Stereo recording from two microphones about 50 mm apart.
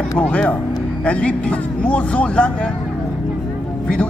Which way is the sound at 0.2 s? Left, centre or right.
Left.